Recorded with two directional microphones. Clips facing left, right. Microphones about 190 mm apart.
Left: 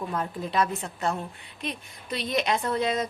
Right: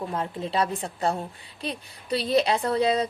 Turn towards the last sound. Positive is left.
turn(degrees=-35)  # may be behind; listen again after turning